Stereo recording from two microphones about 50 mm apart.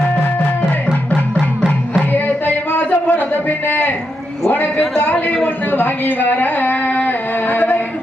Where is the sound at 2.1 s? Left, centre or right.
Left.